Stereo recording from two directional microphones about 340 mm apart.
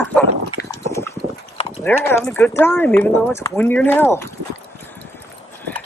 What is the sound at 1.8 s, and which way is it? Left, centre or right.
Speech, centre.